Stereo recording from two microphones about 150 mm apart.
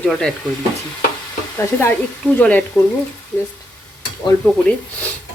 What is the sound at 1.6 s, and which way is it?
Speech, 15° left (ahead or behind).